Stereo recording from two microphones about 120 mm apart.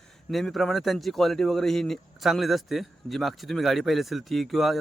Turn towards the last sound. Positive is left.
turn(degrees=0)  # may be behind; listen again after turning